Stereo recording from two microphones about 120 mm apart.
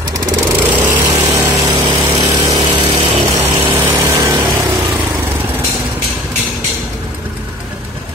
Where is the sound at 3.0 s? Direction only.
50° right (ahead or behind).